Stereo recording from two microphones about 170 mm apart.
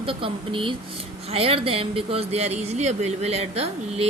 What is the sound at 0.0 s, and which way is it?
Speech, 30° right (ahead or behind).